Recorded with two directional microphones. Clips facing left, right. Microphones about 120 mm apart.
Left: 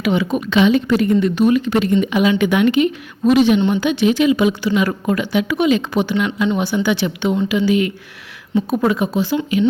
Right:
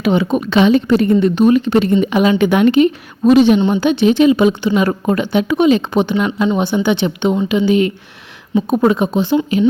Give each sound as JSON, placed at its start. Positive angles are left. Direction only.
{"t": 0.0, "sound": "speech", "side_deg": -30}
{"t": 6.1, "sound": "speech", "side_deg": -40}
{"t": 6.7, "sound": "speech", "side_deg": -25}